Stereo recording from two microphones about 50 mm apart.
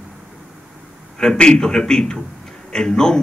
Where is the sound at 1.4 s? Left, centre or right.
Centre.